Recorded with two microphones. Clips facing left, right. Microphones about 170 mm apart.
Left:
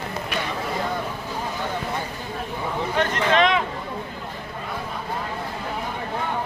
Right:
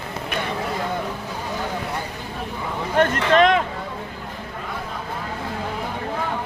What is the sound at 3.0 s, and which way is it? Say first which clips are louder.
Speech: right 4 dB; 50° right (ahead or behind).